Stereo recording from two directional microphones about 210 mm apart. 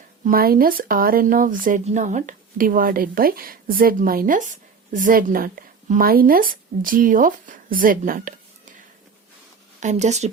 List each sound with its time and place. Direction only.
0.3 s speech: 45° right (ahead or behind)
9.8 s speech: 35° right (ahead or behind)